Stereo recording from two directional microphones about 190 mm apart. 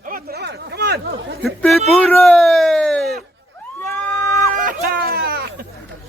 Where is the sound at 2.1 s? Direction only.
5° left (ahead or behind).